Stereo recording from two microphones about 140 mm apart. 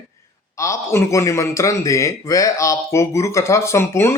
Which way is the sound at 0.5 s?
20° left (ahead or behind).